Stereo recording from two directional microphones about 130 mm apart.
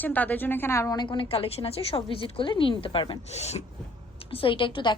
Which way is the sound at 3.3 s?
55° left (ahead or behind).